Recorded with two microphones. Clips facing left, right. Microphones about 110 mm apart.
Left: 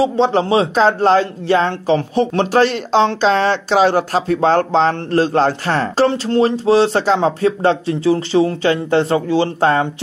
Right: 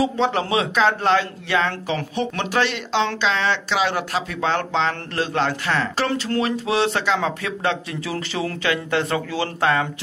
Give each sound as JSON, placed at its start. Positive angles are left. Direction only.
{"t": 0.0, "sound": "speech", "side_deg": 30}